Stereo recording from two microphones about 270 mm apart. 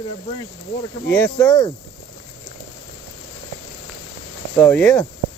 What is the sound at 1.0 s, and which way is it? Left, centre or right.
Speech, centre.